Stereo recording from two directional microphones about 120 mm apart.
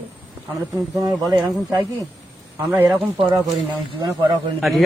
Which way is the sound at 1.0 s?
30° right (ahead or behind).